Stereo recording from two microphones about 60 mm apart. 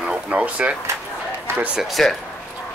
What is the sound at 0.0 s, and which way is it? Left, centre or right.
Speech, right.